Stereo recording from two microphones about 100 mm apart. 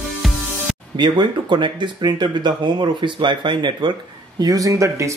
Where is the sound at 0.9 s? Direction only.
50° right (ahead or behind).